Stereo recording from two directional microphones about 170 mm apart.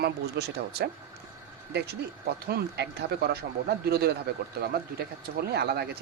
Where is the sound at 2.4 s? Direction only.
65° right (ahead or behind).